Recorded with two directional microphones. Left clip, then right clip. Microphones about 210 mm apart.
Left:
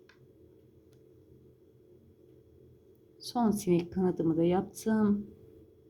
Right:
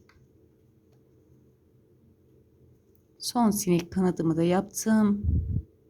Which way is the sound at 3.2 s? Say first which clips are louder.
Right 4 dB; 25° right (ahead or behind).